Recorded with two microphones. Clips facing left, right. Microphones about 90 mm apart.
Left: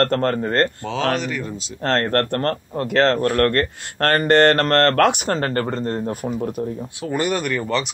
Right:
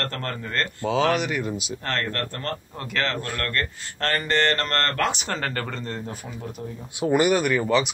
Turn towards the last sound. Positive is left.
turn(degrees=-5)  # may be behind; listen again after turning